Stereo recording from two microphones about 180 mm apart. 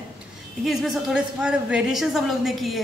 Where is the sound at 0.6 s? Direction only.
Centre (ahead or behind).